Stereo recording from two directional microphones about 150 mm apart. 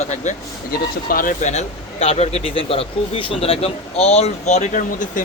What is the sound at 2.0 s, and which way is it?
Speech, 40° left (ahead or behind).